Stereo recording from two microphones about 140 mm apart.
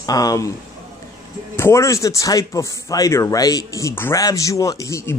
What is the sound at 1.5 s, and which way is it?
Speech, 20° left (ahead or behind).